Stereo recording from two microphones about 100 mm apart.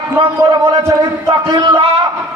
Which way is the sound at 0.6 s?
30° right (ahead or behind).